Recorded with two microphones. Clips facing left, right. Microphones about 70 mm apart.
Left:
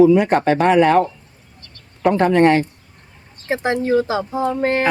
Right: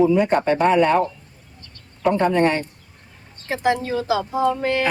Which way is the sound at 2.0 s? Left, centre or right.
Left.